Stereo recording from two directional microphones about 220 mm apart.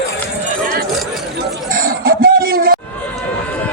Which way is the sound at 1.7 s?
40° right (ahead or behind).